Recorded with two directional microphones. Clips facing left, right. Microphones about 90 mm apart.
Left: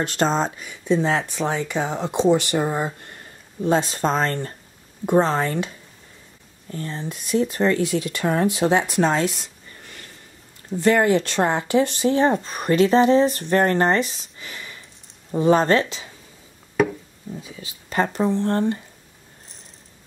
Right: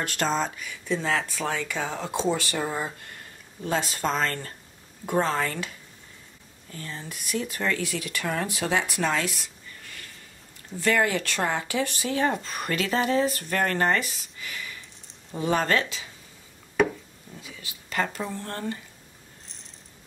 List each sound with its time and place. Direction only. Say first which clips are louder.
0.0 s speech: left 5 dB; 30° left (ahead or behind)
6.7 s speech: left 8 dB; 30° left (ahead or behind)
16.8 s a sound: left 3 dB; 5° left (ahead or behind)
17.4 s speech: left 5 dB; 30° left (ahead or behind)